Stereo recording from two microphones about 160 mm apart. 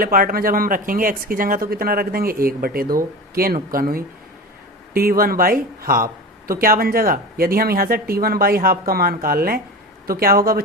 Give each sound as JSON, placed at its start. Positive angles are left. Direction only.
{"t": 0.0, "sound": "speech", "side_deg": -65}